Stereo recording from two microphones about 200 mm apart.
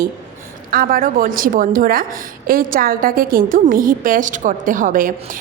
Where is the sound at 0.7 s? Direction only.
45° right (ahead or behind).